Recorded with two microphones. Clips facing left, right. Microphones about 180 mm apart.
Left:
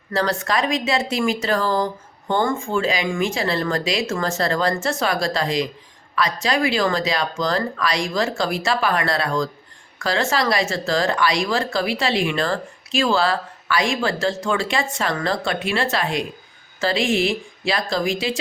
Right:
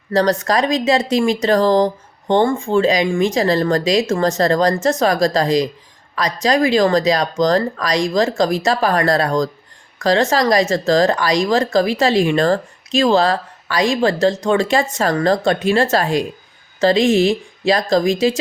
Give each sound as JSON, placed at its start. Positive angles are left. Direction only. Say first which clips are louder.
{"t": 0.1, "sound": "speech", "louder": "right 6 dB", "side_deg": -40}